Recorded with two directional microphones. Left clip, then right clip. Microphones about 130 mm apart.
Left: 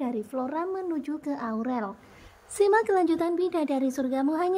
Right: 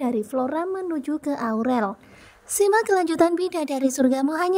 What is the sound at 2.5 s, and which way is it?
A woman's voice, 55° right (ahead or behind).